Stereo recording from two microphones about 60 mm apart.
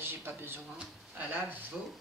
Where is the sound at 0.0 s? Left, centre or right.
Right.